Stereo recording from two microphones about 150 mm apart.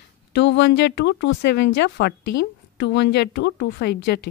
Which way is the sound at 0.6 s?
90° left.